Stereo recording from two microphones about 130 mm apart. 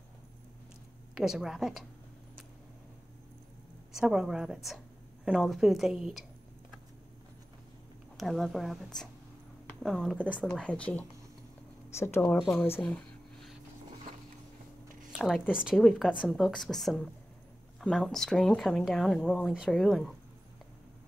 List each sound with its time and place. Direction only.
1.1 s a woman's voice: 5° right (ahead or behind)
3.9 s a woman's voice: 5° right (ahead or behind)
8.2 s a woman's voice: centre (ahead or behind); by 12.8 s 20° left (ahead or behind)
12.8 s a sound: 5° left (ahead or behind)
15.1 s a woman's voice: centre (ahead or behind)
19.3 s a woman's voice: 5° right (ahead or behind)